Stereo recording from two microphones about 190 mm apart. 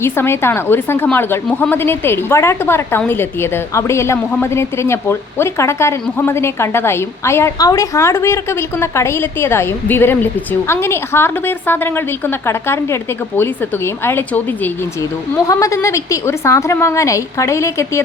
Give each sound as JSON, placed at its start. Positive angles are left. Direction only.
{"t": 0.0, "sound": "a woman's voice", "side_deg": 15}